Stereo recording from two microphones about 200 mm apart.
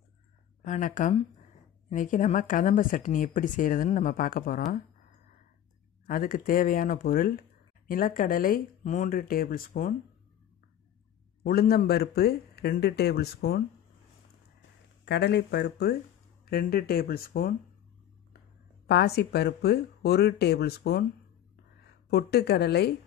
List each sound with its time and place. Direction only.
0.7 s a woman's voice: 40° left (ahead or behind)
6.0 s speech: 45° left (ahead or behind)
11.4 s speech: 50° left (ahead or behind)
15.0 s speech: 60° left (ahead or behind)
18.9 s speech: 55° left (ahead or behind)
22.1 s speech: 55° left (ahead or behind)